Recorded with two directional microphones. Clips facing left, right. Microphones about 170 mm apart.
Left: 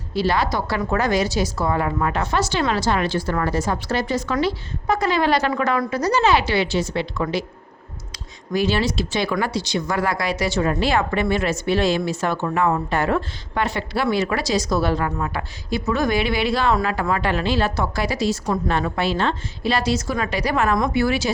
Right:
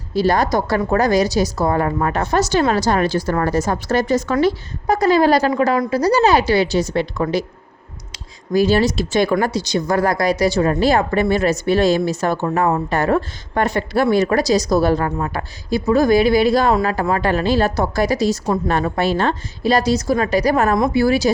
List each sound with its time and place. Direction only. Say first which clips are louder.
0.1 s a woman's voice: right 5 dB; 45° right (ahead or behind)
8.5 s speech: right 5 dB; 40° right (ahead or behind)